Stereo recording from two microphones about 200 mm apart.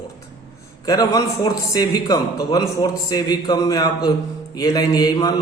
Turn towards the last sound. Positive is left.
turn(degrees=20)  # may be behind; listen again after turning